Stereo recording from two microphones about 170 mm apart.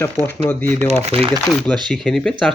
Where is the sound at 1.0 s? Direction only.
35° right (ahead or behind).